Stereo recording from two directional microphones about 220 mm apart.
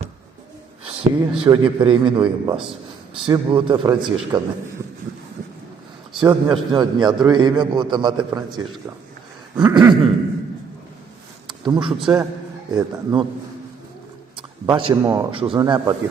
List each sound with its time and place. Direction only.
0.9 s a man's voice: 25° right (ahead or behind)
6.1 s a man's voice: 20° right (ahead or behind)
9.6 s a man's voice: 20° right (ahead or behind)
11.6 s a man's voice: 20° right (ahead or behind)
14.3 s a man's voice: 25° right (ahead or behind)